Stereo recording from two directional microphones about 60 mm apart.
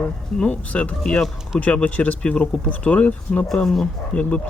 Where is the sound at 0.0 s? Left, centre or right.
Left.